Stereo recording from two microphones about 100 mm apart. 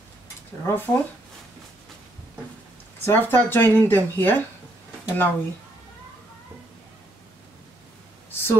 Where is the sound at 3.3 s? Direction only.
20° left (ahead or behind).